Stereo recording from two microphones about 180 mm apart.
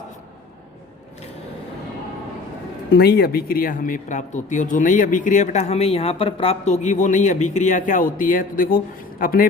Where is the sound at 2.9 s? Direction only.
65° left (ahead or behind).